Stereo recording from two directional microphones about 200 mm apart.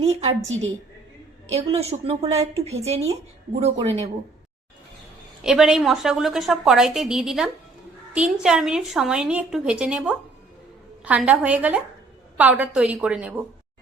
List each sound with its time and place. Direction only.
0.0 s a woman's voice: 30° right (ahead or behind)
5.4 s a woman's voice: 5° right (ahead or behind)